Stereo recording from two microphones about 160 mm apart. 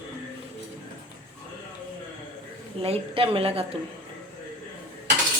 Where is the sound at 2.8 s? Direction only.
35° right (ahead or behind).